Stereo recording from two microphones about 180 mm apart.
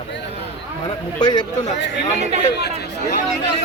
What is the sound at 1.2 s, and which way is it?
Speech, 25° left (ahead or behind).